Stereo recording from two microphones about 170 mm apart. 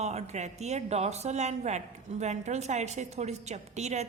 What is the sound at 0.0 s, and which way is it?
A woman's voice, 40° right (ahead or behind).